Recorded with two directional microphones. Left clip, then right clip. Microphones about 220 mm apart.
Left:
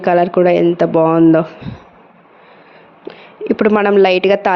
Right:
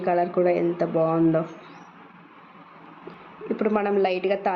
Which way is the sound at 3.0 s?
45° left (ahead or behind).